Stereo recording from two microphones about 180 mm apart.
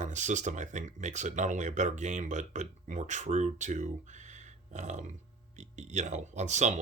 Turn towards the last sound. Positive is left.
turn(degrees=-40)  # may be behind; listen again after turning